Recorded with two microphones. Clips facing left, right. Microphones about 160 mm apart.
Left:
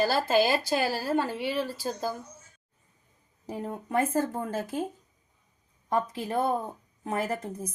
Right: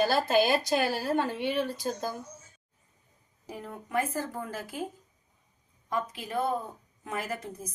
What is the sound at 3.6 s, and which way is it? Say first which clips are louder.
Speech: left 3 dB; 30° left (ahead or behind).